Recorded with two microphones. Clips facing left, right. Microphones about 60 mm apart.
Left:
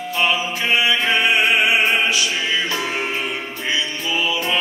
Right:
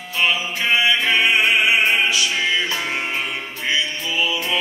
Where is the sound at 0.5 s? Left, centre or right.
Left.